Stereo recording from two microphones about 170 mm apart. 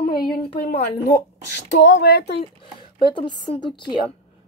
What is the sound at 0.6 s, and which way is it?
Speech, 65° left (ahead or behind).